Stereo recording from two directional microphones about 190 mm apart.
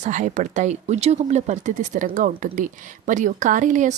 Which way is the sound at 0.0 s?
40° right (ahead or behind).